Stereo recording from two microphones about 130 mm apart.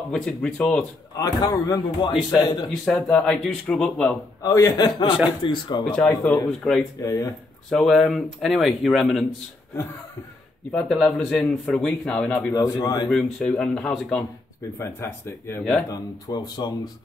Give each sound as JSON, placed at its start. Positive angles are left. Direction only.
{"t": 0.1, "sound": "speech", "side_deg": 5}
{"t": 1.1, "sound": "a man's voice", "side_deg": 25}
{"t": 2.7, "sound": "speech", "side_deg": 0}
{"t": 4.4, "sound": "a man's voice", "side_deg": 25}
{"t": 5.9, "sound": "a man's voice", "side_deg": 10}
{"t": 6.6, "sound": "speech", "side_deg": 0}
{"t": 7.0, "sound": "a man's voice", "side_deg": 25}
{"t": 7.7, "sound": "speech", "side_deg": 5}
{"t": 10.7, "sound": "a man's voice", "side_deg": 5}
{"t": 12.5, "sound": "a man's voice", "side_deg": 30}
{"t": 13.1, "sound": "a man's voice", "side_deg": 5}
{"t": 14.8, "sound": "a man's voice", "side_deg": 20}
{"t": 15.9, "sound": "speech", "side_deg": 30}